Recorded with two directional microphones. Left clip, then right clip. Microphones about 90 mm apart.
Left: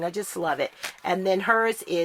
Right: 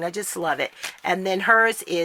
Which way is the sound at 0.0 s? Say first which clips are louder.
Right 1 dB; 35° right (ahead or behind).